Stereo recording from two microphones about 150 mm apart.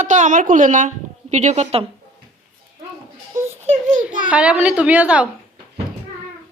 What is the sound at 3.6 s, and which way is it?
Speech, 55° right (ahead or behind).